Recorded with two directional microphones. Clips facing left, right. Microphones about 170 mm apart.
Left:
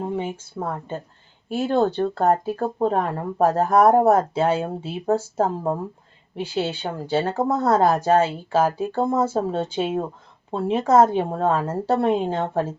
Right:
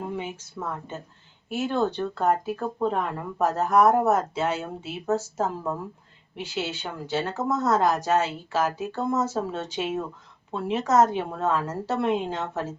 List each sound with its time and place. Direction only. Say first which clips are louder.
0.2 s speech: left 5 dB; 30° left (ahead or behind)